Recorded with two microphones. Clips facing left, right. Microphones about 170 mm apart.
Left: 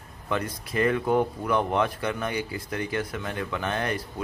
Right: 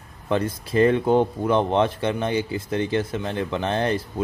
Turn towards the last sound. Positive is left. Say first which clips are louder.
# right 5 dB
turn(degrees=-30)  # may be behind; listen again after turning